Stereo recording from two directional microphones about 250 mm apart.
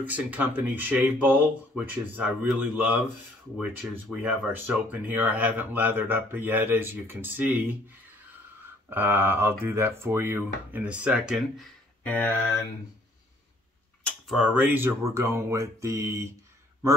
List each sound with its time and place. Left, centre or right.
0.0 s speech: centre
3.5 s speech: centre
8.9 s speech: centre
14.0 s speech: centre